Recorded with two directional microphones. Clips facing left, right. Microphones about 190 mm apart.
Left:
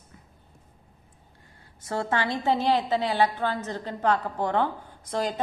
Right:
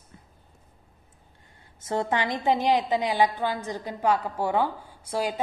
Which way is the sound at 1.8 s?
20° right (ahead or behind).